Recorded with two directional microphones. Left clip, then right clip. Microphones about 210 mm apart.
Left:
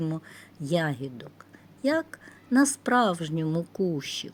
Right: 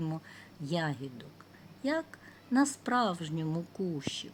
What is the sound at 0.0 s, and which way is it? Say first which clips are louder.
Speech: left 6 dB; 20° left (ahead or behind).